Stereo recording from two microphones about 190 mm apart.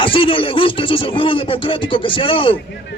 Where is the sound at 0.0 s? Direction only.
25° left (ahead or behind).